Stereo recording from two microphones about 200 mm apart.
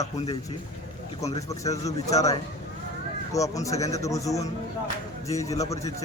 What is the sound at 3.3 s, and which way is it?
A man's voice, 15° left (ahead or behind).